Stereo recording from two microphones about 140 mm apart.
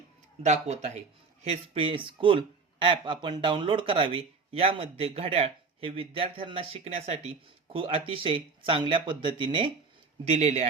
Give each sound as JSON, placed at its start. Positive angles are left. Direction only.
{"t": 0.4, "sound": "speech", "side_deg": -55}
{"t": 1.5, "sound": "speech", "side_deg": -40}
{"t": 10.2, "sound": "speech", "side_deg": -50}